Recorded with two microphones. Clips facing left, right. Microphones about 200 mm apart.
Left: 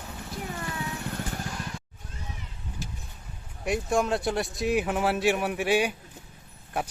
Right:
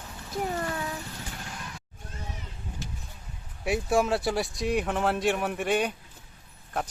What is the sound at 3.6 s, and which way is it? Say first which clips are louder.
A man's voice: right 1 dB; centre (ahead or behind).